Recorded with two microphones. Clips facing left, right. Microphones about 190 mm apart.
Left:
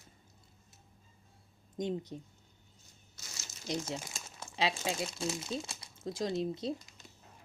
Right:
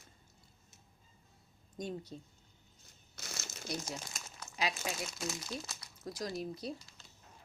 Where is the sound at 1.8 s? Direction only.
20° left (ahead or behind).